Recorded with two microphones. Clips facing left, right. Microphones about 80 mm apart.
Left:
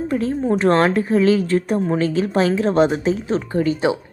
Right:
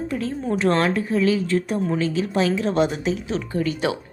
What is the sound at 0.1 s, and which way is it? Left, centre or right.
Speech, left.